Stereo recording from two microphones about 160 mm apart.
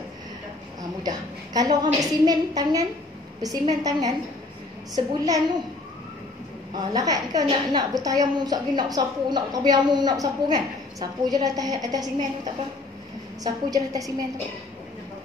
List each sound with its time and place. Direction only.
1.0 s a woman's voice: 25° right (ahead or behind)
6.7 s a woman's voice: 25° right (ahead or behind)
13.4 s a woman's voice: 20° right (ahead or behind)